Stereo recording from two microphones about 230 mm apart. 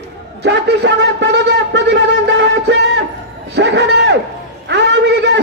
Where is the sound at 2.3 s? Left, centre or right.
Right.